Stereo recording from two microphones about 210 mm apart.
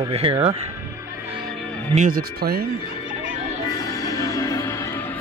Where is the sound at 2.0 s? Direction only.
45° right (ahead or behind).